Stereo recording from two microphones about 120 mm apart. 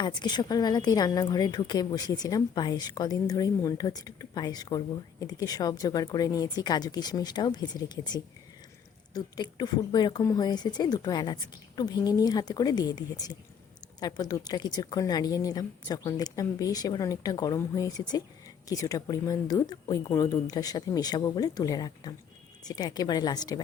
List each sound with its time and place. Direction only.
0.0 s a woman's voice: 35° left (ahead or behind)